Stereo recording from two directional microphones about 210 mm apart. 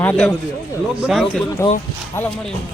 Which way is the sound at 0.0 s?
5° left (ahead or behind).